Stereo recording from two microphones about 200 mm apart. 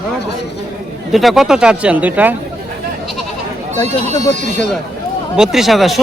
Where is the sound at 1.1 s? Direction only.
Centre (ahead or behind).